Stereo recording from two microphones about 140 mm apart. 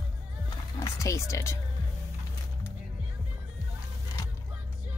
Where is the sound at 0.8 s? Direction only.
20° left (ahead or behind).